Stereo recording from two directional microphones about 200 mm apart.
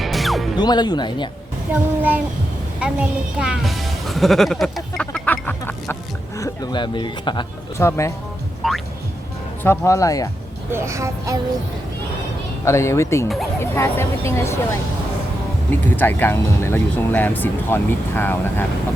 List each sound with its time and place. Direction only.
0.0 s music: centre (ahead or behind)
0.5 s speech: 20° left (ahead or behind)
2.0 s speech: 10° right (ahead or behind); by 8.1 s 15° left (ahead or behind)
8.6 s music: centre (ahead or behind)
9.6 s speech: 15° left (ahead or behind)
10.7 s speech: 15° right (ahead or behind)
12.6 s speech: 15° left (ahead or behind)
13.2 s speech: centre (ahead or behind)
13.6 s speech: 10° left (ahead or behind)
15.7 s speech: 10° left (ahead or behind)